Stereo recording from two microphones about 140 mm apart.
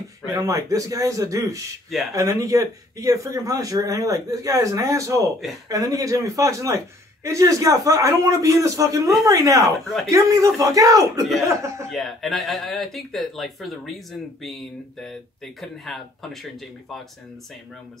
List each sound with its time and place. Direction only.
0.3 s speech: 25° right (ahead or behind)
11.9 s speech: centre (ahead or behind)